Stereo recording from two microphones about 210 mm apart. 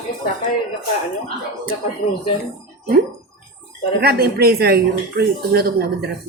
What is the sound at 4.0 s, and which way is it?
A woman's voice, 50° right (ahead or behind).